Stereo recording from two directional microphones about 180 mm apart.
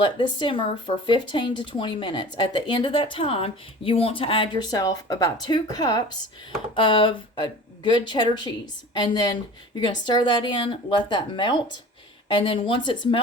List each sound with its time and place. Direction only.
0.0 s speech: 25° left (ahead or behind)